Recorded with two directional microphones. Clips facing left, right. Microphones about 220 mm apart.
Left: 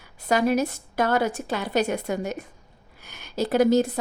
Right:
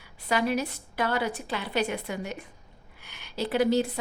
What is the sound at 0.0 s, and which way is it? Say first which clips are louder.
A woman's voice: left 5 dB; 45° left (ahead or behind).